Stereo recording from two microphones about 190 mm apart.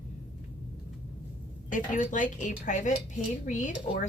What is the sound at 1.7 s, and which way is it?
Speech, 40° left (ahead or behind).